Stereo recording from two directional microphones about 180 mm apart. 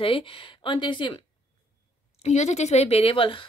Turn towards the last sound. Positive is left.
turn(degrees=30)  # may be behind; listen again after turning